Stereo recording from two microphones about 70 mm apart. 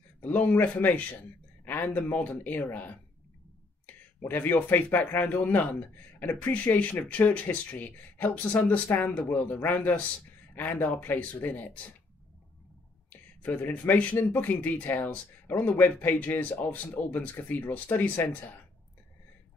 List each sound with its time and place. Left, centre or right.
0.2 s speech: left
4.3 s speech: left
13.4 s speech: left